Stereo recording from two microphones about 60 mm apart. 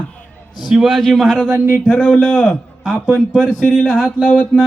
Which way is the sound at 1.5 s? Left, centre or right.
Right.